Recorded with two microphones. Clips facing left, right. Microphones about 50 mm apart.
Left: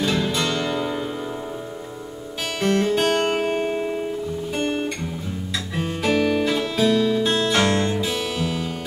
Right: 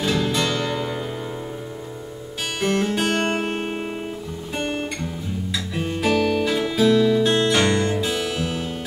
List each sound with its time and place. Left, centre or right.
0.1 s music: centre
2.6 s guitar: centre
3.6 s music: centre
4.6 s music: centre